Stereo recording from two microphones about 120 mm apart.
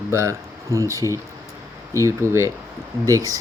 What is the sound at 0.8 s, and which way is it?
Speech, 25° left (ahead or behind).